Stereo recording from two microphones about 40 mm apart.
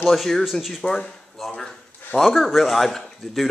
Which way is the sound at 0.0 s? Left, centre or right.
Centre.